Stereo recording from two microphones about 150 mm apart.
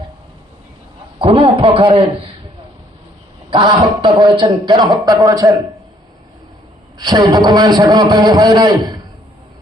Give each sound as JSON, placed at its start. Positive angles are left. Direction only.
{"t": 1.2, "sound": "a man's voice", "side_deg": -40}
{"t": 3.5, "sound": "a man's voice", "side_deg": -30}
{"t": 7.0, "sound": "a man's voice", "side_deg": -25}